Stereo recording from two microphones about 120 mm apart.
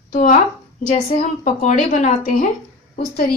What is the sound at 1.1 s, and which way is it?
A woman's voice, 70° left (ahead or behind).